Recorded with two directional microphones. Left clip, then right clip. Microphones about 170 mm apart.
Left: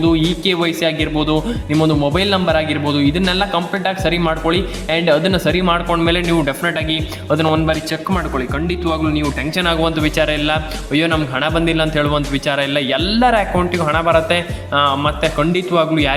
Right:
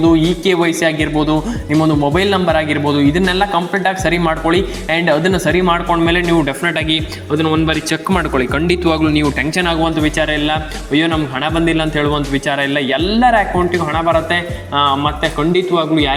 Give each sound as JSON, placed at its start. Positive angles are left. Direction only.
{"t": 0.0, "sound": "speech", "side_deg": 5}
{"t": 7.3, "sound": "a man's voice", "side_deg": 20}
{"t": 7.7, "sound": "speech", "side_deg": -5}
{"t": 8.2, "sound": "speech", "side_deg": -15}
{"t": 9.6, "sound": "speech", "side_deg": 0}
{"t": 9.9, "sound": "speech", "side_deg": 10}